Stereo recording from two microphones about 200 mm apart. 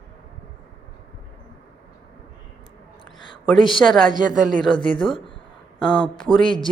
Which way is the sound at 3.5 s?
25° left (ahead or behind).